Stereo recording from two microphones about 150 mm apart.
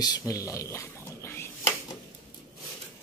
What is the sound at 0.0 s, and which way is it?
Speech, 25° left (ahead or behind).